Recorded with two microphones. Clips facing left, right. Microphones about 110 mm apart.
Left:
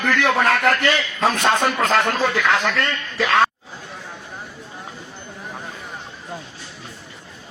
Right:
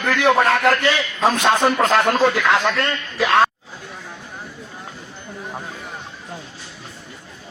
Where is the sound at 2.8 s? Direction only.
5° right (ahead or behind).